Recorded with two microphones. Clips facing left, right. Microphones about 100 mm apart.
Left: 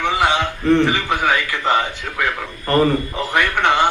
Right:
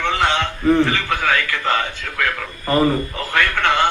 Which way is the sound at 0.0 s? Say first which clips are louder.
Left 1 dB; 10° left (ahead or behind).